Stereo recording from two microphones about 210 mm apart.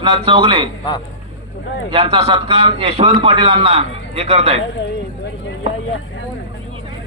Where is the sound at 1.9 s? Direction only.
25° right (ahead or behind).